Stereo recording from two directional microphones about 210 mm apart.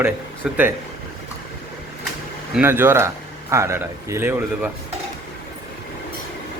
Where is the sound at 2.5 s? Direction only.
10° right (ahead or behind).